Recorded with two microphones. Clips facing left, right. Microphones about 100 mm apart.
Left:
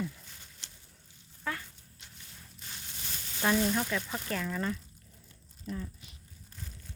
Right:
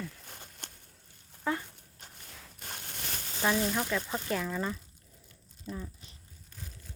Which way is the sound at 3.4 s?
Centre (ahead or behind).